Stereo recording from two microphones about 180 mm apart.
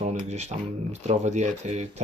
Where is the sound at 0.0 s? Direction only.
40° right (ahead or behind).